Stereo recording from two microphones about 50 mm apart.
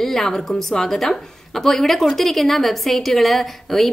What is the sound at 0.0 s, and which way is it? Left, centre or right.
A woman's voice, centre.